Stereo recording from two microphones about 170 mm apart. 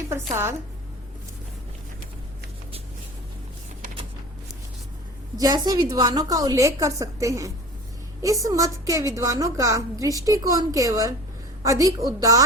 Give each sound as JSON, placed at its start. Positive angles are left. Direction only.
{"t": 0.1, "sound": "speech", "side_deg": -15}
{"t": 5.4, "sound": "a woman's voice", "side_deg": -25}